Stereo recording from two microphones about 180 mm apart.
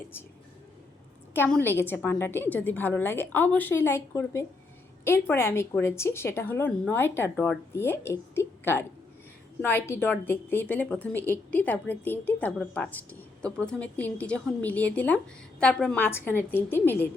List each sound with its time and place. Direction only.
1.3 s a woman's voice: 10° left (ahead or behind)